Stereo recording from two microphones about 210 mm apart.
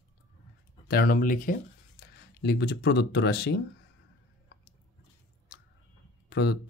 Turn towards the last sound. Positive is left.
turn(degrees=55)  # may be behind; listen again after turning